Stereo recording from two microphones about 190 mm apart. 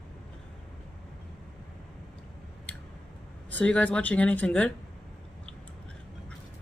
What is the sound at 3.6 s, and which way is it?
Speech, 5° left (ahead or behind).